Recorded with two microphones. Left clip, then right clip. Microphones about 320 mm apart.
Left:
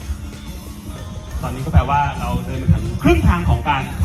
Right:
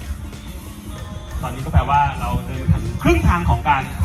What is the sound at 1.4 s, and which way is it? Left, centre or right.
Music, right.